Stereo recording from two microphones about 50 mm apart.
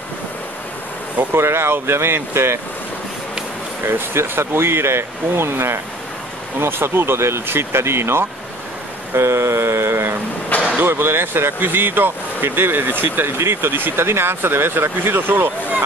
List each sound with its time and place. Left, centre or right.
1.3 s speech: right
3.8 s speech: right
13.4 s speech: right